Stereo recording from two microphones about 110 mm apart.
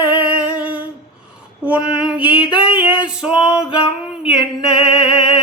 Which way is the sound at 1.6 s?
10° right (ahead or behind).